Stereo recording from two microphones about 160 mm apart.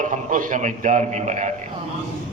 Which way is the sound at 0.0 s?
55° right (ahead or behind).